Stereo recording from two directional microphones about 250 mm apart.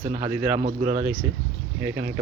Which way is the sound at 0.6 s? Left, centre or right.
Right.